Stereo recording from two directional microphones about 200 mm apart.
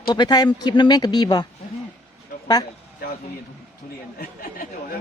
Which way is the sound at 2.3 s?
45° left (ahead or behind).